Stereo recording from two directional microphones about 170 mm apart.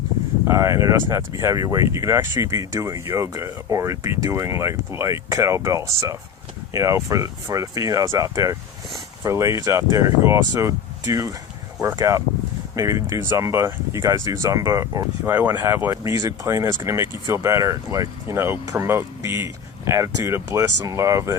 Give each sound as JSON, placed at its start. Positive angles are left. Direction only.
{"t": 0.4, "sound": "speech", "side_deg": -15}